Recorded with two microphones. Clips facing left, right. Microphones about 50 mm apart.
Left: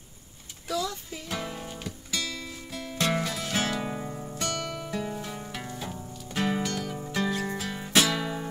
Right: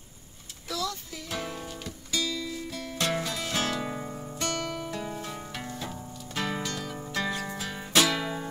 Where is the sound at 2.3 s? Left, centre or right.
Centre.